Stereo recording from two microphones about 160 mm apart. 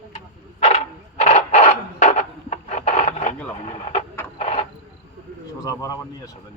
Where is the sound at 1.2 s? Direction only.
50° left (ahead or behind).